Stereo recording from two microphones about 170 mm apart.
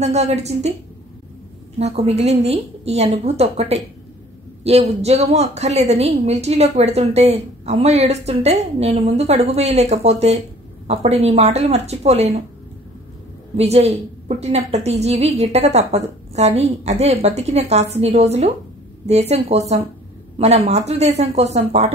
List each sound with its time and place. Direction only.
0.0 s a woman's voice: 40° right (ahead or behind)
1.8 s a woman's voice: 40° right (ahead or behind)
13.6 s a woman's voice: 40° right (ahead or behind)